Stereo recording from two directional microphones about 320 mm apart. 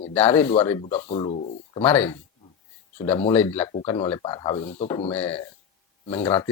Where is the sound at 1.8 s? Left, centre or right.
Centre.